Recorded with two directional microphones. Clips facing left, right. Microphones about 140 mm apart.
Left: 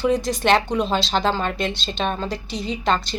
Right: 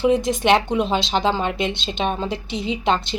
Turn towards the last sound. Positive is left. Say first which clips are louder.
# right 1 dB
turn(degrees=-20)  # may be behind; listen again after turning